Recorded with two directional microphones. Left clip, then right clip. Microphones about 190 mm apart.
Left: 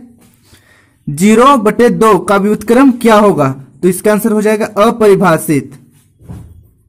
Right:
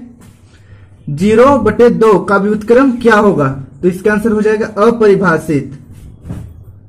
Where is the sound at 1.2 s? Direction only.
45° left (ahead or behind).